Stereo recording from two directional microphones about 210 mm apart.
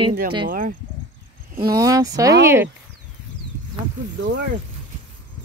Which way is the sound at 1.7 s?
15° right (ahead or behind).